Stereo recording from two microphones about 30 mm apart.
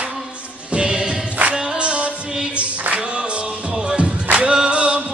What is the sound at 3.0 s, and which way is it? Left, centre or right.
Singing, right.